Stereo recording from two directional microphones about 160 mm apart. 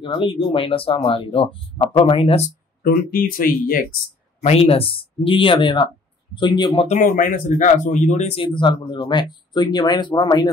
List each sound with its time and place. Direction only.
0.0 s speech: 30° left (ahead or behind)
2.8 s speech: 60° left (ahead or behind)
4.4 s speech: 40° left (ahead or behind)
6.9 s speech: 55° left (ahead or behind)
8.4 s speech: 30° left (ahead or behind)